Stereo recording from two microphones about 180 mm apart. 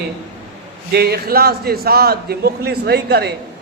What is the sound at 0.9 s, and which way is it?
A man's voice, 60° right (ahead or behind).